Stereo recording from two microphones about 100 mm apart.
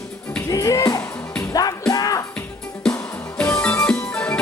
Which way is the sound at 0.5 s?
35° left (ahead or behind).